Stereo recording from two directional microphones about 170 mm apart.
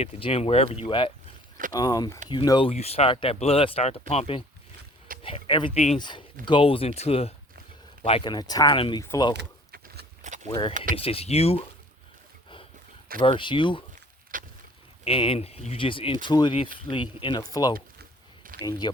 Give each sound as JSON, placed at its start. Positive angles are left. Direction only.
{"t": 0.0, "sound": "speech", "side_deg": 35}
{"t": 4.8, "sound": "wild animals", "side_deg": -55}
{"t": 5.2, "sound": "speech", "side_deg": 30}
{"t": 9.4, "sound": "keys jangling", "side_deg": -70}
{"t": 10.4, "sound": "speech", "side_deg": 30}
{"t": 13.2, "sound": "speech", "side_deg": 30}
{"t": 14.3, "sound": "vehicle", "side_deg": -50}
{"t": 15.0, "sound": "speech", "side_deg": 35}
{"t": 18.4, "sound": "a sound", "side_deg": -55}